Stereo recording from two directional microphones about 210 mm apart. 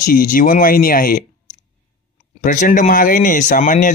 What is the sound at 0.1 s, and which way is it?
Speech, 40° left (ahead or behind).